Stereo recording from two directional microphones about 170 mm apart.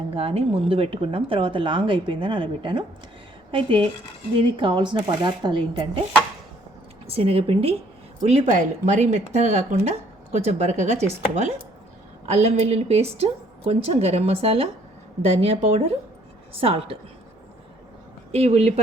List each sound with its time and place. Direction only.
0.1 s a woman's voice: 35° right (ahead or behind)
7.1 s a woman's voice: 35° right (ahead or behind)
18.3 s speech: 40° right (ahead or behind)